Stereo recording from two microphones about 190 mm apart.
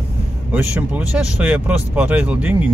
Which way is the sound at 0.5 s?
10° right (ahead or behind).